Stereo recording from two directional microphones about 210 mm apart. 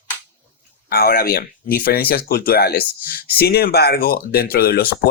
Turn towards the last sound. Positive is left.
turn(degrees=45)  # may be behind; listen again after turning